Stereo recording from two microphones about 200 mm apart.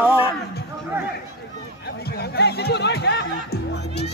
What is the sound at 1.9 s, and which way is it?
Music, 55° left (ahead or behind).